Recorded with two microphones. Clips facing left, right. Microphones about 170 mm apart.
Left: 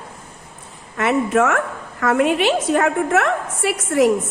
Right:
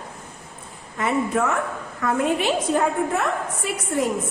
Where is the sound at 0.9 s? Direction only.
80° left.